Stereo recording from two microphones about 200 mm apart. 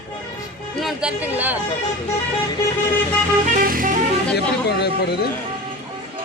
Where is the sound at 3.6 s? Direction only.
45° right (ahead or behind).